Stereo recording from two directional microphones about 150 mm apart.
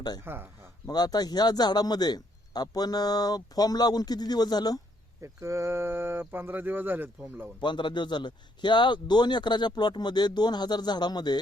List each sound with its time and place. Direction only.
0.3 s speech: 15° right (ahead or behind)
0.9 s speech: 25° left (ahead or behind)
5.2 s speech: 20° right (ahead or behind)
7.6 s speech: 30° left (ahead or behind)